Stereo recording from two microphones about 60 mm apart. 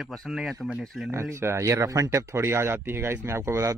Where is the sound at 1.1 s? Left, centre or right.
Right.